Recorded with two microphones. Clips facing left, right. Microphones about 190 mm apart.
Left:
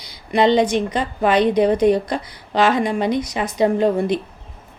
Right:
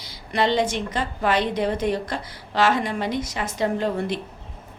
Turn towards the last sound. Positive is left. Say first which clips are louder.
# left 7 dB
turn(degrees=15)  # may be behind; listen again after turning